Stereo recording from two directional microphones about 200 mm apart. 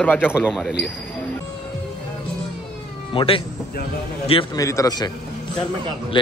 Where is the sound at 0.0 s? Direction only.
10° left (ahead or behind).